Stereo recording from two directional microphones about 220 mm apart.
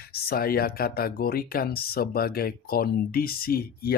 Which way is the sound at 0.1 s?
45° left (ahead or behind).